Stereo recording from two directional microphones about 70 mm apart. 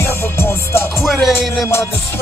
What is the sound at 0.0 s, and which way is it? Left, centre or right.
Music, left.